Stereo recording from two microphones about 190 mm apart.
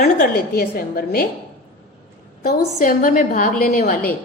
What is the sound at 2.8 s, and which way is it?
A woman's voice, 45° left (ahead or behind).